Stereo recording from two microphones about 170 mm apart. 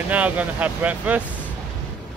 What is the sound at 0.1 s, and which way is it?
Speech, 10° right (ahead or behind).